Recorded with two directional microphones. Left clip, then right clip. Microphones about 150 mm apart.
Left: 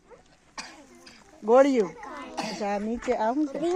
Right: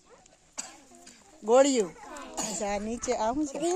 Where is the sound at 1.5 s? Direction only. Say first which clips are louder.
Left 2 dB; 10° right (ahead or behind).